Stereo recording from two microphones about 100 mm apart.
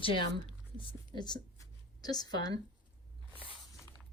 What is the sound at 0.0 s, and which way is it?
A woman's voice, 60° left (ahead or behind).